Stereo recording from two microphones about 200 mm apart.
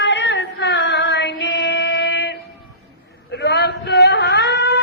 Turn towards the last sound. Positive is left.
turn(degrees=60)  # may be behind; listen again after turning